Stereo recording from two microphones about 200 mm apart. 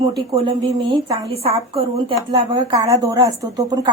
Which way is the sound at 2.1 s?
20° right (ahead or behind).